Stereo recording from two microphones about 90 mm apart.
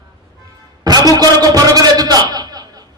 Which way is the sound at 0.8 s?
45° right (ahead or behind).